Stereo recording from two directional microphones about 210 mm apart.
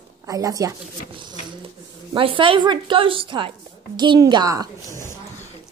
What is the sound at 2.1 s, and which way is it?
Speech, 25° right (ahead or behind).